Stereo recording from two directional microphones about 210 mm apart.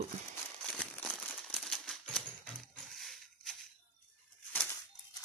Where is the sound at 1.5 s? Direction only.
5° left (ahead or behind).